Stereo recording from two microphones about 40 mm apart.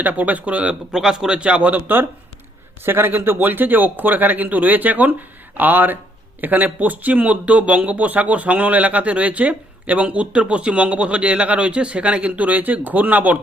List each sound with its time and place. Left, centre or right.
0.0 s speech: right
0.9 s a man's voice: centre; by 1.8 s right
2.8 s speech: right